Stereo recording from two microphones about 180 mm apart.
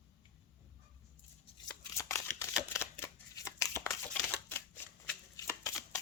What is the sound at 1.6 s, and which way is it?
Shuffling cards, 15° left (ahead or behind).